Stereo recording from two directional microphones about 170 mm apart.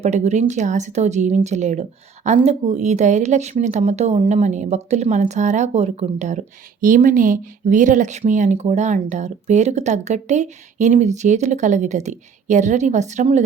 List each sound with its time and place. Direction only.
0.0 s speech: 40° right (ahead or behind)